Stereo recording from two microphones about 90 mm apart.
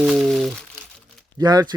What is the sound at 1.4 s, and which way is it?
Speech, 45° right (ahead or behind).